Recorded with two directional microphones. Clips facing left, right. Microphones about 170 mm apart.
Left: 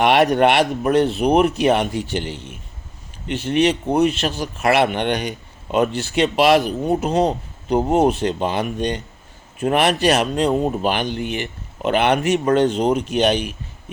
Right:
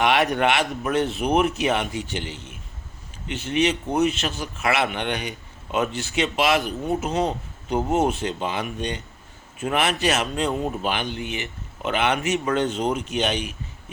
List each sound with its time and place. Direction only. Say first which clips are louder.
0.0 s speech: left 6 dB; 40° left (ahead or behind)
3.3 s speech: left 5 dB; 35° left (ahead or behind)